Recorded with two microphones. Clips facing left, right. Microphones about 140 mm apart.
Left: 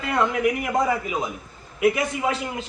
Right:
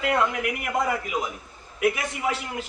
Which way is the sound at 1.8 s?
25° left (ahead or behind).